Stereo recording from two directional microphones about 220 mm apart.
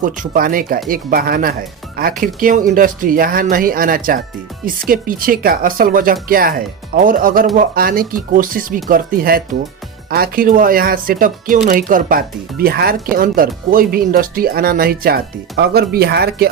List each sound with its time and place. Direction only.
0.0 s speech: 40° right (ahead or behind)